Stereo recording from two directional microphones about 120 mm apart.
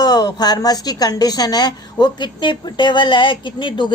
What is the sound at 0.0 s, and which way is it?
A woman's voice, 30° left (ahead or behind).